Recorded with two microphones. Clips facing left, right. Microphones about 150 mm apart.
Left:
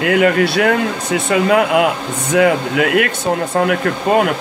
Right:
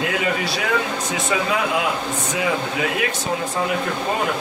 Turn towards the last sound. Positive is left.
turn(degrees=65)  # may be behind; listen again after turning